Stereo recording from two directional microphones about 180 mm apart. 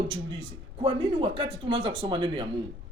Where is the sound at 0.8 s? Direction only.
30° right (ahead or behind).